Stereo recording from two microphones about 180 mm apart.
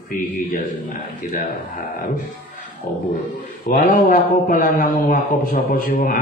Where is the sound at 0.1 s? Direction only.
45° left (ahead or behind).